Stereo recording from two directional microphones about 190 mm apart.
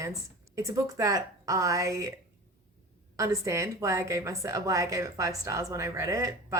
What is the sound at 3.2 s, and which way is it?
A woman's voice, 15° right (ahead or behind).